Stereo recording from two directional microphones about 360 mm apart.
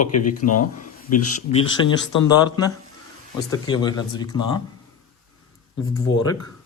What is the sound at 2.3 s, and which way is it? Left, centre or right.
Speech, centre.